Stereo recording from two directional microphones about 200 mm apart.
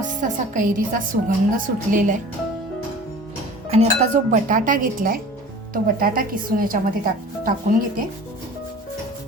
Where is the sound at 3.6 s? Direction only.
35° right (ahead or behind).